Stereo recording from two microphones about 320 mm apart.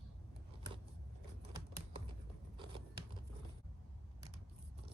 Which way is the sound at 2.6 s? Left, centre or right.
Centre.